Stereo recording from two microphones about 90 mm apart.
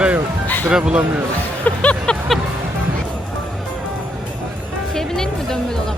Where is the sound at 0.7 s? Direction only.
10° right (ahead or behind).